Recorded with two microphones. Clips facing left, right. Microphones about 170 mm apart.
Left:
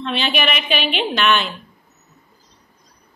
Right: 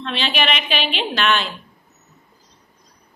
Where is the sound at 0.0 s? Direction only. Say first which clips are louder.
Left 2 dB; centre (ahead or behind).